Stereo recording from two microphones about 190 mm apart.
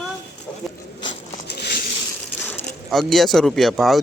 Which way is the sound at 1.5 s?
55° left (ahead or behind).